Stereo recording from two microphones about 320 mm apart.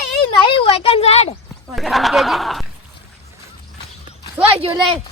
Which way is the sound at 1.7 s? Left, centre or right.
Centre.